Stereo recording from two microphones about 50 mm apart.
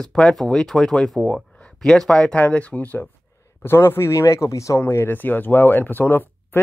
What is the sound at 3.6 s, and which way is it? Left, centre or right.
Speech, left.